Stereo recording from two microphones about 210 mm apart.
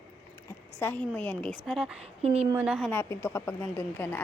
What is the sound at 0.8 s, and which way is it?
A woman's voice, 10° left (ahead or behind).